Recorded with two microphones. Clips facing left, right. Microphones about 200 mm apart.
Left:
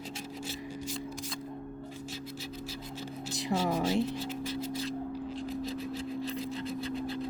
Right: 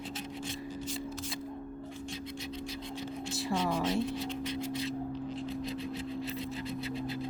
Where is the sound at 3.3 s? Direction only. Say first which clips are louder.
Left 2 dB; 20° left (ahead or behind).